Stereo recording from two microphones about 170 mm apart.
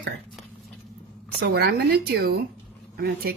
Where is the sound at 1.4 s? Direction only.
70° right (ahead or behind).